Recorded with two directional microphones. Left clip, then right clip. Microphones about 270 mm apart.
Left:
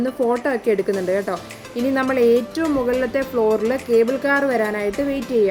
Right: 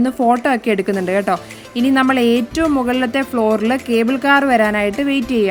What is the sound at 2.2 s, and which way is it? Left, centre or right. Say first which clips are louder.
Speech: even; right.